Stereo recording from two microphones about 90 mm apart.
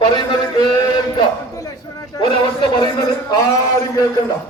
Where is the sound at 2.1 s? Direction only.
50° left (ahead or behind).